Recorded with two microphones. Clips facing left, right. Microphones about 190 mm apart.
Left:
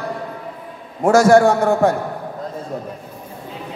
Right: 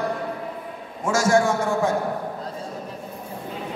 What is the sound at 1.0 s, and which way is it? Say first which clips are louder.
Speech: left 8 dB; 60° left (ahead or behind).